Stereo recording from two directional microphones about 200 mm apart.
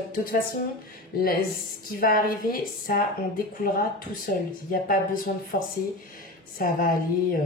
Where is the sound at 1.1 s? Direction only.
45° left (ahead or behind).